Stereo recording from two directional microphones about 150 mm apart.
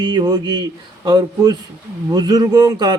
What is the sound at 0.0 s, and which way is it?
Speech, 30° right (ahead or behind).